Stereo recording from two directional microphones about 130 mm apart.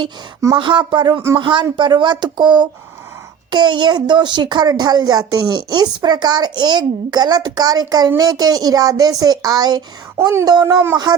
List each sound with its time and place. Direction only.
0.5 s speech: 40° right (ahead or behind)
10.2 s speech: 20° right (ahead or behind)
10.4 s speech: 30° right (ahead or behind)